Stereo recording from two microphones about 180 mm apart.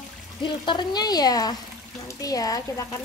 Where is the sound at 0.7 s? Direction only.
25° left (ahead or behind).